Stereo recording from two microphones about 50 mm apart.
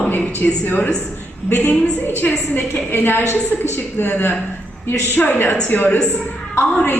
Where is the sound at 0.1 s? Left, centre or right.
Left.